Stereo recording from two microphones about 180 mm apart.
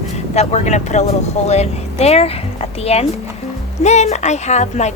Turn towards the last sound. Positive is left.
turn(degrees=40)  # may be behind; listen again after turning